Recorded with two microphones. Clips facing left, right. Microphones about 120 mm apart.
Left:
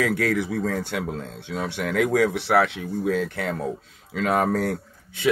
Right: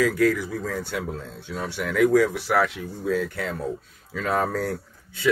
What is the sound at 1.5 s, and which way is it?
Speech, 20° left (ahead or behind).